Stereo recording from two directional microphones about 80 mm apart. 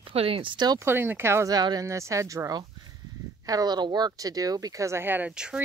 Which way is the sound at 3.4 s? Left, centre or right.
Right.